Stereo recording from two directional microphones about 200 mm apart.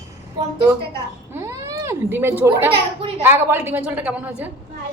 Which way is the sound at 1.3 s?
15° right (ahead or behind).